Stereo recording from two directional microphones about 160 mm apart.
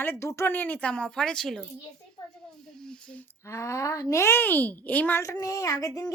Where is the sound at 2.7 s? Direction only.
5° left (ahead or behind).